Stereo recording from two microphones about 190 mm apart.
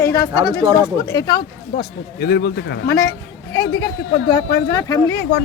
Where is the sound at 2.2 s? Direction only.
60° left (ahead or behind).